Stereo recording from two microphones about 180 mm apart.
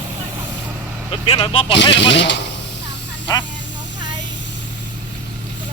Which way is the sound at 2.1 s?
75° left (ahead or behind).